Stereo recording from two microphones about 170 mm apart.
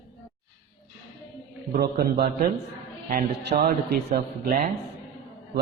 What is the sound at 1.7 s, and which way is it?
A man's voice, 65° right (ahead or behind).